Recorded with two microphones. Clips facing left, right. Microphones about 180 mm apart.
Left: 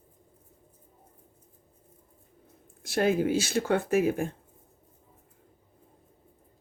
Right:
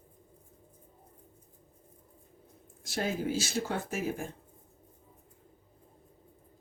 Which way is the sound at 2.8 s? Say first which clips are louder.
Left 8 dB; 60° left (ahead or behind).